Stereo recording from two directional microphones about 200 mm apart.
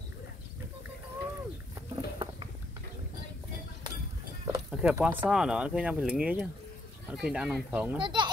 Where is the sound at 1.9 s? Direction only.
25° right (ahead or behind).